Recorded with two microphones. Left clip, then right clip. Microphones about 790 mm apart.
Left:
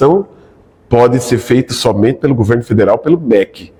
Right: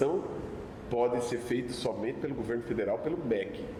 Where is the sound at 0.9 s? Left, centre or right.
Left.